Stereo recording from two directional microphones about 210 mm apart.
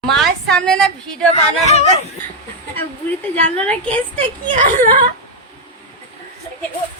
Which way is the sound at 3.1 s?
5° left (ahead or behind).